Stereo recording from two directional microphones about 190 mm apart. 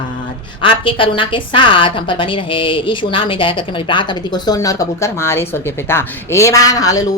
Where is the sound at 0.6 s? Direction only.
25° left (ahead or behind).